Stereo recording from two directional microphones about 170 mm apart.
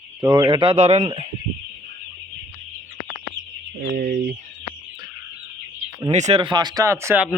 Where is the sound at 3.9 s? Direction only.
65° right (ahead or behind).